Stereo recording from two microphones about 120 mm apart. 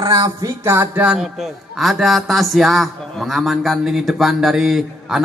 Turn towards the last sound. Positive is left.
turn(degrees=-5)  # may be behind; listen again after turning